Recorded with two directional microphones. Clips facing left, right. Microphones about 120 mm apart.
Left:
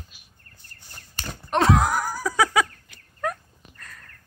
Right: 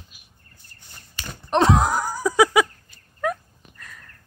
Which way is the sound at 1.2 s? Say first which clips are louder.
Left 2 dB; 45° left (ahead or behind).